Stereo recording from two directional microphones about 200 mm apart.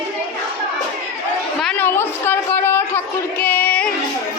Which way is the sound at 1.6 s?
5° left (ahead or behind).